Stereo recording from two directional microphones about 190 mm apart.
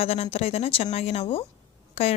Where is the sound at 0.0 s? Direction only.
30° left (ahead or behind).